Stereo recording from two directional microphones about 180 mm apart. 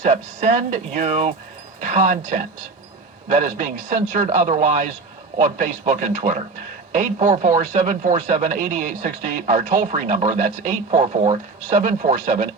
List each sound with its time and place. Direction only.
0.0 s a man's voice: 45° right (ahead or behind)